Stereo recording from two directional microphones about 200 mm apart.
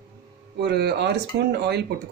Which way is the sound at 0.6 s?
55° right (ahead or behind).